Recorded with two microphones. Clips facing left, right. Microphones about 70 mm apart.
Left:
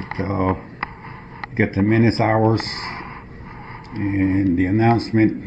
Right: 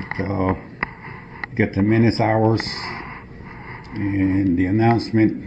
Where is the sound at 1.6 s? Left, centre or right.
Left.